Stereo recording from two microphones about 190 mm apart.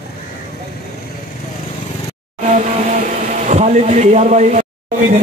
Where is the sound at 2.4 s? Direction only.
40° right (ahead or behind).